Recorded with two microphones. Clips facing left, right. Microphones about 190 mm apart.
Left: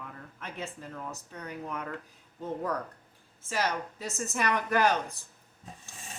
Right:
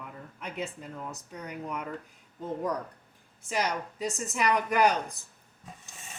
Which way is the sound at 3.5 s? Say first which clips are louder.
Right 1 dB; 15° right (ahead or behind).